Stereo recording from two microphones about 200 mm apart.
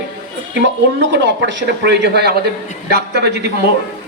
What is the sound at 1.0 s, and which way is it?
A man's voice, 60° right (ahead or behind).